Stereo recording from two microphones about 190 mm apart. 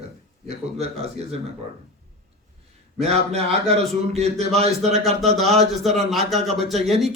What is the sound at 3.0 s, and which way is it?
A man's voice, 35° right (ahead or behind).